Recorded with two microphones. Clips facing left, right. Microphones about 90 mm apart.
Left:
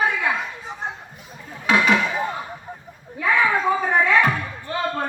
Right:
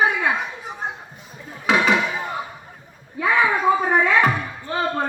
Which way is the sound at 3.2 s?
15° right (ahead or behind).